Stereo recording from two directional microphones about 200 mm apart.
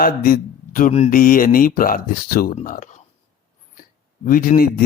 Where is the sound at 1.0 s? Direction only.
45° left (ahead or behind).